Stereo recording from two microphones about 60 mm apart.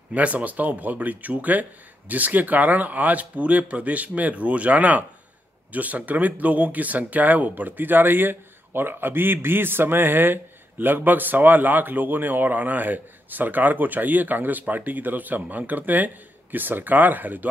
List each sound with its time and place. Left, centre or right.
0.1 s speech: right